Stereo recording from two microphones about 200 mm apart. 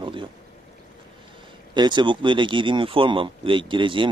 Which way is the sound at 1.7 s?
20° right (ahead or behind).